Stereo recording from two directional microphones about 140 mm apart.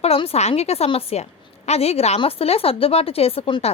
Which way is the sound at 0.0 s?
45° left (ahead or behind).